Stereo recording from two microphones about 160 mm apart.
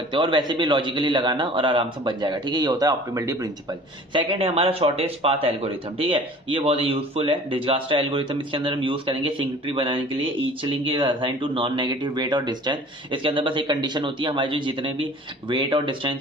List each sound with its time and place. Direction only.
0.1 s a man's voice: 30° right (ahead or behind)